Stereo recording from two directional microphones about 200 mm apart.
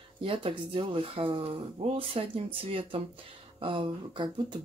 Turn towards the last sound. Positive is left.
turn(degrees=-25)  # may be behind; listen again after turning